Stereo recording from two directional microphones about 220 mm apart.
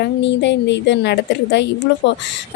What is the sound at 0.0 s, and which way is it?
Speech, 55° left (ahead or behind).